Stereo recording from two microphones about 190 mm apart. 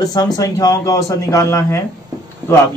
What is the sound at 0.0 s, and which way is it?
A man's voice, 20° left (ahead or behind).